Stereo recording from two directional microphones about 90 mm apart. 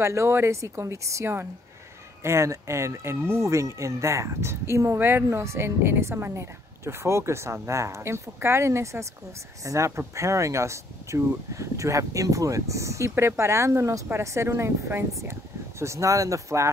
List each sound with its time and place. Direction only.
0.0 s speech: 30° right (ahead or behind)